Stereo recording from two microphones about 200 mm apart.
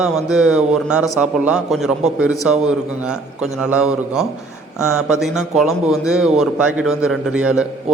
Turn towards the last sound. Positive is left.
turn(degrees=-5)  # may be behind; listen again after turning